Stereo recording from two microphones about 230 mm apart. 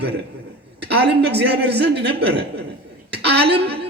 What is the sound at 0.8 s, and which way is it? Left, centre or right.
A man's voice, right.